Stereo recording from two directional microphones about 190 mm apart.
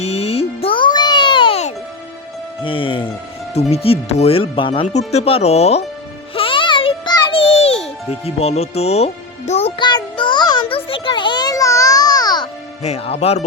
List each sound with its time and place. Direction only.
0.0 s music: 35° left (ahead or behind)
3.5 s speech: 35° left (ahead or behind)
6.3 s music: 30° left (ahead or behind)
12.8 s speech: 35° left (ahead or behind)